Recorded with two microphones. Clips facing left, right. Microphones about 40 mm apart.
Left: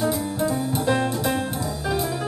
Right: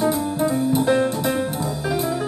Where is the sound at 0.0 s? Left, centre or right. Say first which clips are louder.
Right 3 dB; right.